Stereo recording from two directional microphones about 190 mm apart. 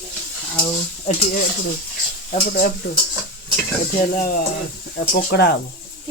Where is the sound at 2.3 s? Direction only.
40° left (ahead or behind).